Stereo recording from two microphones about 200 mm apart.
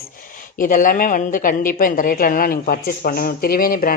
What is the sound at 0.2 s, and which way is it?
Speech, 40° left (ahead or behind).